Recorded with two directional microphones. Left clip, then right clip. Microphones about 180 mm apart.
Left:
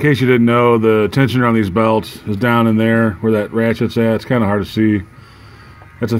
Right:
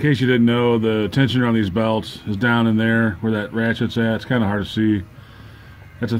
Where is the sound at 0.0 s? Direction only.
10° left (ahead or behind).